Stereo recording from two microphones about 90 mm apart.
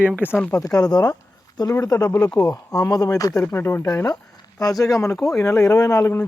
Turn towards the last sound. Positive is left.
turn(degrees=25)  # may be behind; listen again after turning